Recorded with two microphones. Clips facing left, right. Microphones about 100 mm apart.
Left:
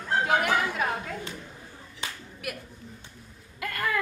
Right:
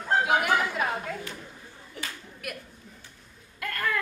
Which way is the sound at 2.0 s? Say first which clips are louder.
Even; 55° right (ahead or behind).